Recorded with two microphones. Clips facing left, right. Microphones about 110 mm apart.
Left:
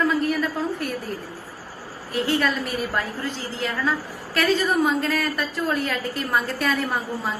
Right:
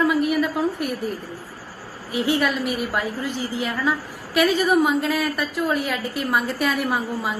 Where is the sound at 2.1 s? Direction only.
15° right (ahead or behind).